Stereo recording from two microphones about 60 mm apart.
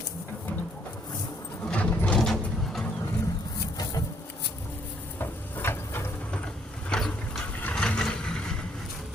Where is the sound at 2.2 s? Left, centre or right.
Centre.